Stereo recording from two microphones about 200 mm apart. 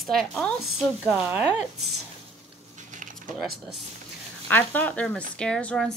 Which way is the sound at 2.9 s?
40° right (ahead or behind).